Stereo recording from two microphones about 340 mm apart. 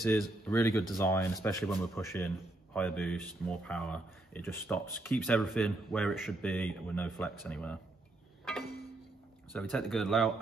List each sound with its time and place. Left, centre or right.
0.0 s speech: centre
9.5 s speech: centre